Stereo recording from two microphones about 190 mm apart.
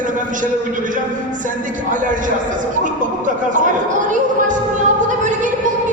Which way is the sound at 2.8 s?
45° right (ahead or behind).